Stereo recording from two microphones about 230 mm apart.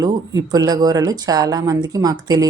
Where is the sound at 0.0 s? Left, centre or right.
Centre.